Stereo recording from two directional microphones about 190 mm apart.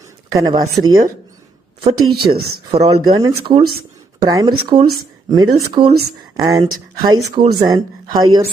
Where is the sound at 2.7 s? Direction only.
30° right (ahead or behind).